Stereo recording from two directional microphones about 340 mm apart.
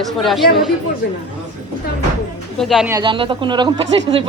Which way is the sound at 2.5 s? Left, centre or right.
Centre.